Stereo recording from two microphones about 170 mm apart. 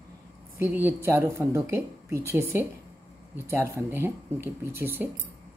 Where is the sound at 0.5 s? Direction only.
15° right (ahead or behind).